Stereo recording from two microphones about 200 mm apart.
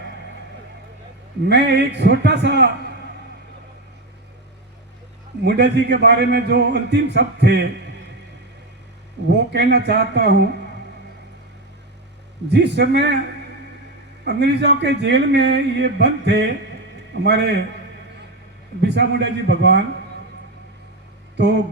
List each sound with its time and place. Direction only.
1.5 s a man's voice: 60° right (ahead or behind)
5.4 s a man's voice: 60° right (ahead or behind)
9.3 s a man's voice: 60° right (ahead or behind)
12.5 s a man's voice: 60° right (ahead or behind)
14.3 s a man's voice: 55° right (ahead or behind)
18.8 s a man's voice: 60° right (ahead or behind)
21.3 s speech: 60° right (ahead or behind)